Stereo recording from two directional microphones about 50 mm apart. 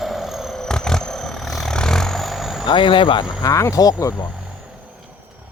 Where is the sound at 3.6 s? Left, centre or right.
Left.